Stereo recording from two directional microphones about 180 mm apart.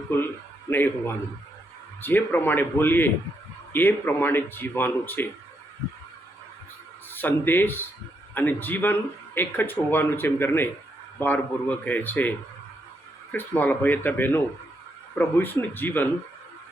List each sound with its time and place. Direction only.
0.1 s speech: 15° left (ahead or behind)
7.1 s speech: 10° left (ahead or behind)
13.3 s speech: 10° left (ahead or behind)